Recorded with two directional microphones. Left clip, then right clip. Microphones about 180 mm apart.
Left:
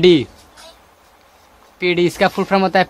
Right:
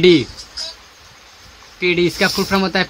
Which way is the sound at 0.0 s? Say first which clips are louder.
Even; 15° left (ahead or behind).